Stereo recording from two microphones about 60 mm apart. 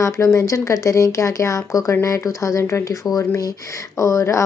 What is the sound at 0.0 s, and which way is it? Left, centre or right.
Speech, left.